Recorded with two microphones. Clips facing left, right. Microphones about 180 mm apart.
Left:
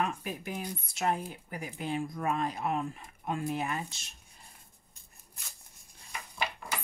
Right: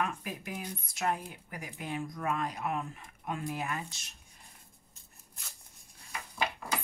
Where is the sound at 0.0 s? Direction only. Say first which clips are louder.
Left 2 dB; 30° left (ahead or behind).